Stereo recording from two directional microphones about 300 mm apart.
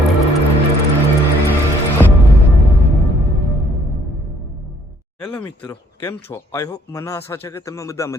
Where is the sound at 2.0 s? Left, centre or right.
Centre.